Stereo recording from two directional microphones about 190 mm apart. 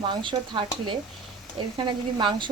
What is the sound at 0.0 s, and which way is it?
Speech, 25° right (ahead or behind).